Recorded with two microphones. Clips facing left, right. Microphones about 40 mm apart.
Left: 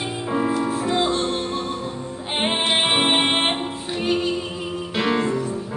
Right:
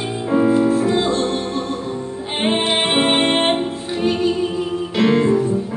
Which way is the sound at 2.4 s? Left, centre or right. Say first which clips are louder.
Right 3 dB; centre.